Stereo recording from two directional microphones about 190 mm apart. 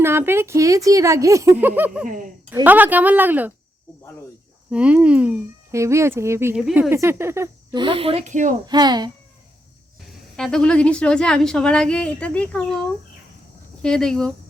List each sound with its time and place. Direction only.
0.0 s speech: 10° right (ahead or behind)
2.0 s speech: 45° right (ahead or behind)
2.5 s speech: 10° right (ahead or behind)
4.7 s speech: 5° right (ahead or behind)
6.6 s speech: centre (ahead or behind)
6.9 s speech: 15° right (ahead or behind)
7.8 s speech: 30° right (ahead or behind)
8.6 s a child's voice: 20° right (ahead or behind)
10.1 s speech: centre (ahead or behind)
13.8 s speech: 5° left (ahead or behind)